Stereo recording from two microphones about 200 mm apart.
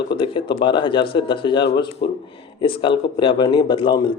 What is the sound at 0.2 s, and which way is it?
Speech, 25° left (ahead or behind).